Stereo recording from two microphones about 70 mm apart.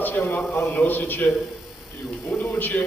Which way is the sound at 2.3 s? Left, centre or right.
Left.